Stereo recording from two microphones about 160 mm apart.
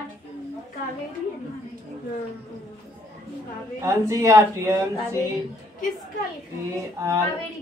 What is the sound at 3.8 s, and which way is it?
A woman's voice, 20° right (ahead or behind).